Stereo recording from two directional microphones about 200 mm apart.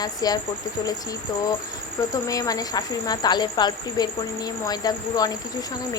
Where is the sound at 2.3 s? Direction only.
20° left (ahead or behind).